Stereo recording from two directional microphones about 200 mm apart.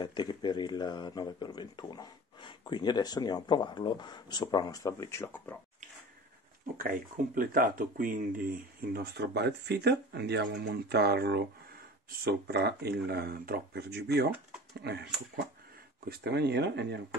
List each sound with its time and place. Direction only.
0.0 s speech: 20° left (ahead or behind)
6.8 s speech: 45° right (ahead or behind)
16.1 s speech: 55° right (ahead or behind)